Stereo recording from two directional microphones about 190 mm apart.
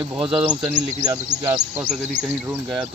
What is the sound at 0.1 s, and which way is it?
Speech, 5° right (ahead or behind).